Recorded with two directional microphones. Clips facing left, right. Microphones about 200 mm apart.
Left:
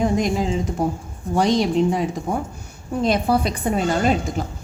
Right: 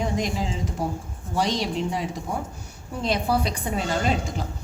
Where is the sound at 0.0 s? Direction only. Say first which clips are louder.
Left 6 dB; 55° left (ahead or behind).